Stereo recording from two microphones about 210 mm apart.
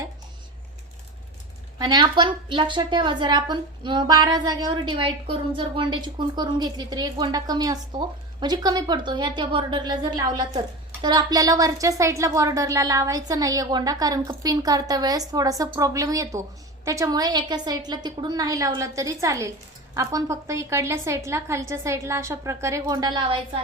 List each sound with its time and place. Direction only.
1.8 s a woman's voice: 20° right (ahead or behind)